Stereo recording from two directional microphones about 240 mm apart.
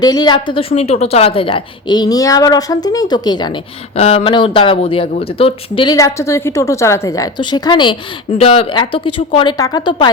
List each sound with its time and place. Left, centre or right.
0.0 s a woman's voice: centre